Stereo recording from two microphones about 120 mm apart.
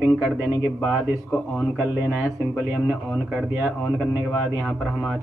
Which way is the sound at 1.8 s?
10° right (ahead or behind).